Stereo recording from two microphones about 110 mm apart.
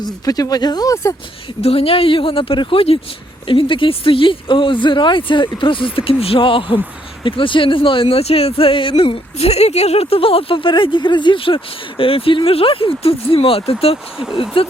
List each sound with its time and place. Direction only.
0.0 s speech: 35° left (ahead or behind)
1.6 s speech: 60° left (ahead or behind)